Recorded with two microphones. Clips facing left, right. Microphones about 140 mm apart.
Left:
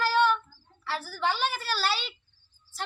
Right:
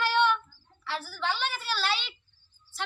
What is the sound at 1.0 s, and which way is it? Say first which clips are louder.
Speech: left 4 dB; 45° left (ahead or behind).